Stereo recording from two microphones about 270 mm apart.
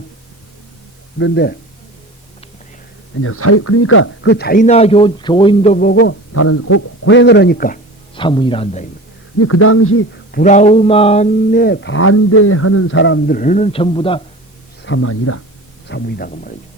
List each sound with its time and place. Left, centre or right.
1.2 s speech: left
3.2 s speech: left
6.3 s a man's voice: left
8.1 s a man's voice: centre
9.4 s a man's voice: left
10.3 s speech: left
14.8 s a man's voice: left
15.9 s speech: left